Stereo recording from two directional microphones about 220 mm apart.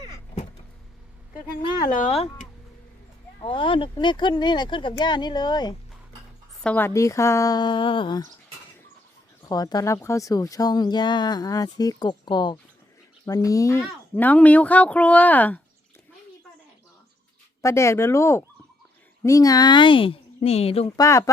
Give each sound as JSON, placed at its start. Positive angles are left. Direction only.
{"t": 1.8, "sound": "speech", "side_deg": 35}
{"t": 3.4, "sound": "speech", "side_deg": 25}
{"t": 6.6, "sound": "speech", "side_deg": 5}
{"t": 9.5, "sound": "speech", "side_deg": 15}
{"t": 17.6, "sound": "speech", "side_deg": 15}
{"t": 21.0, "sound": "speech", "side_deg": 15}